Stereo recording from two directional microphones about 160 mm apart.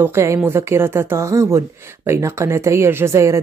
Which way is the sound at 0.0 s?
15° right (ahead or behind).